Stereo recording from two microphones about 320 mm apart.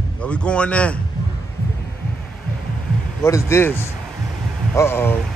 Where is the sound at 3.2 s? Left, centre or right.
Centre.